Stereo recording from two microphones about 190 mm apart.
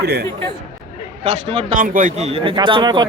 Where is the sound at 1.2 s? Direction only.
25° right (ahead or behind).